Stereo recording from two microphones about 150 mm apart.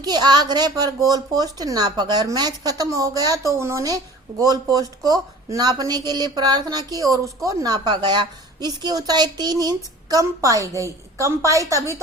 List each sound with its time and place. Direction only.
0.0 s a woman's voice: 30° right (ahead or behind)